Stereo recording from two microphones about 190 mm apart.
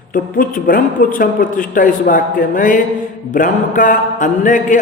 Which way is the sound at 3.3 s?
45° left (ahead or behind).